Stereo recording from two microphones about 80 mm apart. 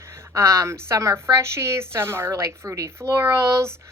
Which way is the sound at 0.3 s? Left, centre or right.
Right.